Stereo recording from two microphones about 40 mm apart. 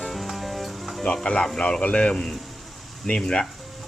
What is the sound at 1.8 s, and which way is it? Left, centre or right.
Speech, left.